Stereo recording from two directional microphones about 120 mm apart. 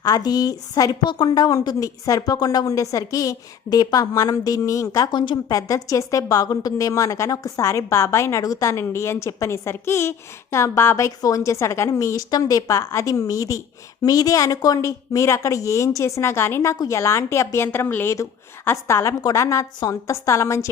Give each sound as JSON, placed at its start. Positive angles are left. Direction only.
{"t": 0.0, "sound": "a woman's voice", "side_deg": 35}
{"t": 5.5, "sound": "a woman's voice", "side_deg": 30}